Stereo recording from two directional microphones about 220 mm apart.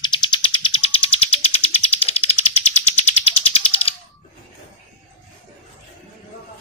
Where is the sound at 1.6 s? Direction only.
25° left (ahead or behind).